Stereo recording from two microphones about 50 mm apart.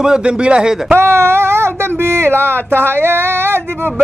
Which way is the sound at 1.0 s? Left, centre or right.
Right.